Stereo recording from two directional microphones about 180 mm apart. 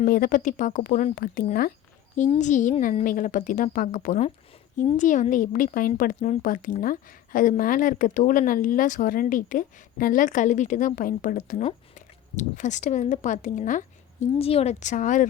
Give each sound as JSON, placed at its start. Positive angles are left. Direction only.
{"t": 0.0, "sound": "speech", "side_deg": 50}
{"t": 2.4, "sound": "speech", "side_deg": 45}